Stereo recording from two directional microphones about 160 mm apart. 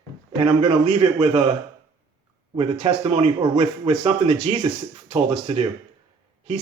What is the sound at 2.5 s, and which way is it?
Speech, 40° right (ahead or behind).